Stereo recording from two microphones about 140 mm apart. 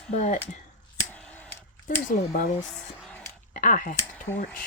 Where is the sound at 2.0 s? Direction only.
75° left (ahead or behind).